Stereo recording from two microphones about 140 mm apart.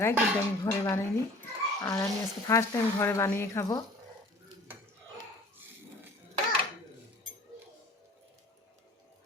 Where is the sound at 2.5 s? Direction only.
20° left (ahead or behind).